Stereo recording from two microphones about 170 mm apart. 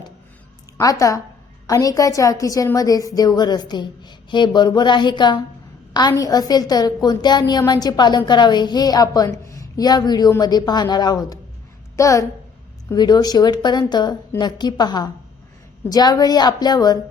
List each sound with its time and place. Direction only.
0.8 s a woman's voice: 20° left (ahead or behind)